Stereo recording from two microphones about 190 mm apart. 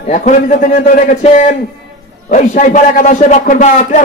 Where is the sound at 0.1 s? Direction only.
40° left (ahead or behind).